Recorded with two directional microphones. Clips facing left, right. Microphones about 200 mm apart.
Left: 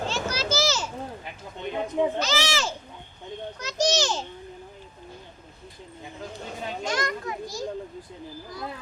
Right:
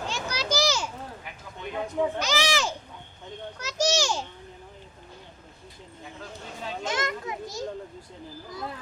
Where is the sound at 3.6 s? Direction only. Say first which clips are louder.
Left 1 dB; 5° right (ahead or behind).